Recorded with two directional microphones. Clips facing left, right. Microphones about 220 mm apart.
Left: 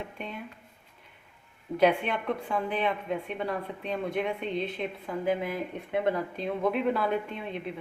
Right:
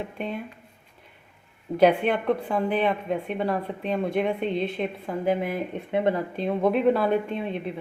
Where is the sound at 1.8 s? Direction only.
35° right (ahead or behind).